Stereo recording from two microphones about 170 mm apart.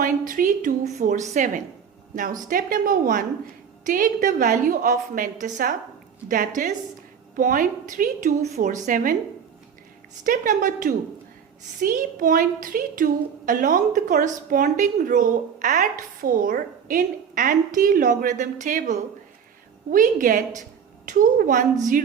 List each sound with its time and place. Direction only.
0.0 s a woman's voice: 50° right (ahead or behind)
10.2 s a woman's voice: 50° right (ahead or behind)